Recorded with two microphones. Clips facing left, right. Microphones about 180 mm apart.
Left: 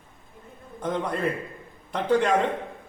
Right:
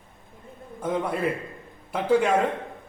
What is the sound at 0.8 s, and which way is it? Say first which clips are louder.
A man's voice: right 1 dB; 5° right (ahead or behind).